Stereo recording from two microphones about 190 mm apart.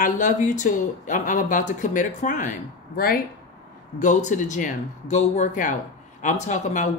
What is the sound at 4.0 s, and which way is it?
Speech, 40° left (ahead or behind).